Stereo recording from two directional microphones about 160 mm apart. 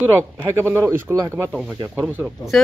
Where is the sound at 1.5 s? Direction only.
Centre (ahead or behind).